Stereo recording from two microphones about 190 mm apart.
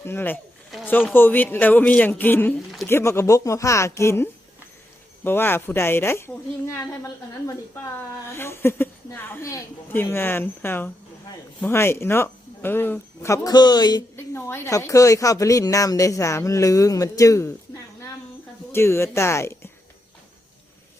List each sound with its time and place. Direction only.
0.0 s a woman's voice: 10° left (ahead or behind)
18.7 s a woman's voice: 15° left (ahead or behind)